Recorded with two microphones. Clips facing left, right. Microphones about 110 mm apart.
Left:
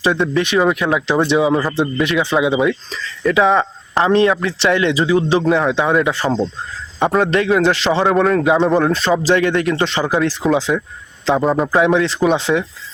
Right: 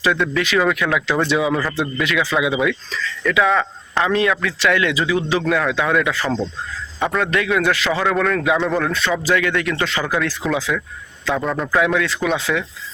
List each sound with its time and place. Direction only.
0.0 s a man's voice: 30° left (ahead or behind)